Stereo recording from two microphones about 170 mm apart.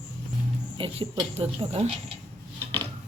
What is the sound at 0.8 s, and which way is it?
Speech, 35° right (ahead or behind).